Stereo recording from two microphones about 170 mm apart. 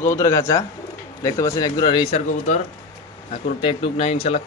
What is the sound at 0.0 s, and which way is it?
A man's voice, 15° left (ahead or behind).